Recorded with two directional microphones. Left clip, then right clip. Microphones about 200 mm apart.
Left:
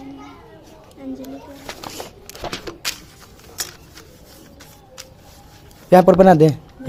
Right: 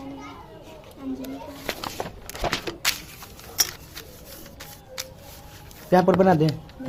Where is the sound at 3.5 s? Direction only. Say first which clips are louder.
Right 5 dB; 5° right (ahead or behind).